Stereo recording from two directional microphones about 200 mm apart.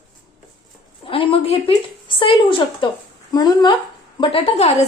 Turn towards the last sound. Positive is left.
turn(degrees=30)  # may be behind; listen again after turning